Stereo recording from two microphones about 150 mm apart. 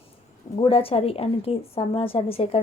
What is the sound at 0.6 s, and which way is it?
A woman's voice, 40° left (ahead or behind).